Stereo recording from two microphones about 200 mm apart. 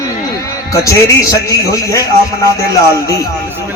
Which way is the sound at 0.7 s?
15° left (ahead or behind).